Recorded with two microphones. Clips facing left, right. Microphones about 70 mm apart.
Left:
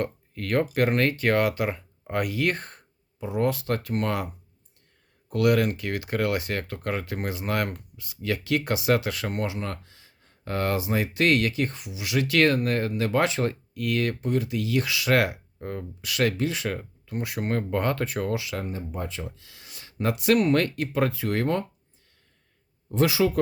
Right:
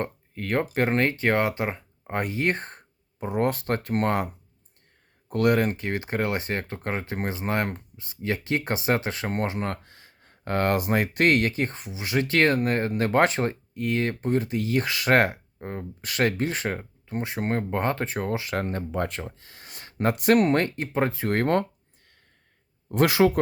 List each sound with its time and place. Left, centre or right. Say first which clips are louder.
0.0 s speech: left 1 dB; right
5.3 s speech: even; right
12.9 s speech: right 3 dB; right
13.4 s speech: even; right
18.6 s speech: right 5 dB; right
19.1 s speech: right 1 dB; right
22.9 s speech: right 2 dB; right